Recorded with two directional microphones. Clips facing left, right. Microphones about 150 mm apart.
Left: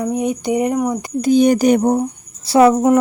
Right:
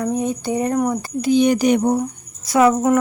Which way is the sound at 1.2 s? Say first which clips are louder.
Left 3 dB; 45° left (ahead or behind).